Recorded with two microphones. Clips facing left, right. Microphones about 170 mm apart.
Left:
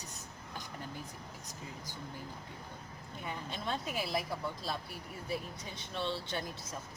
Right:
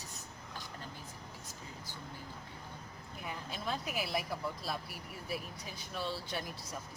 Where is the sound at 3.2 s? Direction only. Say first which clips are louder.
Left 1 dB; 5° right (ahead or behind).